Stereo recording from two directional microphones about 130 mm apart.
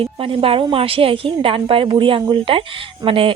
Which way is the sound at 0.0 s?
45° right (ahead or behind).